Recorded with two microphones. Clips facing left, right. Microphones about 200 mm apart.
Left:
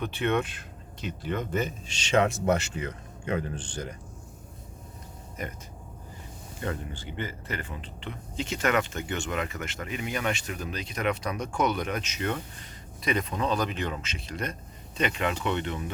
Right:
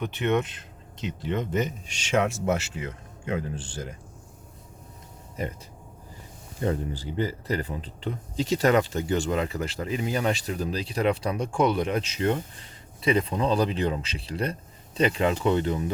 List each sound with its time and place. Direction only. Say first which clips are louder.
0.0 s speech: right 2 dB; 20° right (ahead or behind)
5.4 s speech: right 5 dB; 30° right (ahead or behind)
6.6 s speech: right 6 dB; 35° right (ahead or behind)